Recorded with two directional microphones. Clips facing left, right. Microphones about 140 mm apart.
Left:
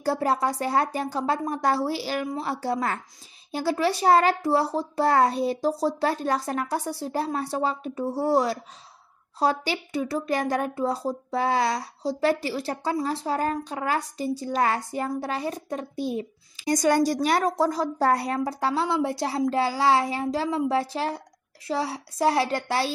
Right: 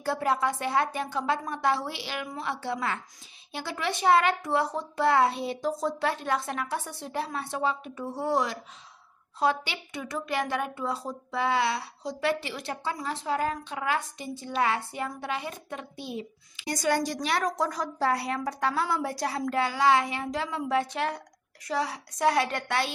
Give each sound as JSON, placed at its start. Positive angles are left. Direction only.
{"t": 0.0, "sound": "speech", "side_deg": 35}
{"t": 17.9, "sound": "a woman's voice", "side_deg": 45}
{"t": 18.4, "sound": "speech", "side_deg": 30}